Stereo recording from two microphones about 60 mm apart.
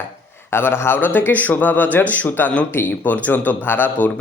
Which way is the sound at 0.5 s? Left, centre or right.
Left.